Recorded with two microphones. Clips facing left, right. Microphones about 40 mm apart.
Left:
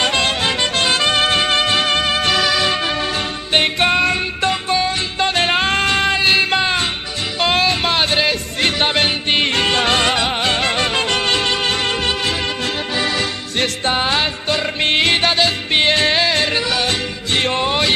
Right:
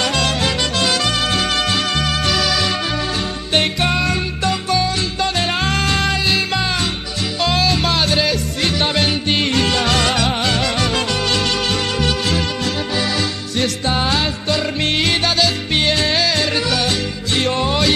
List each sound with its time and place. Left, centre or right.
0.0 s music: left
13.9 s music: left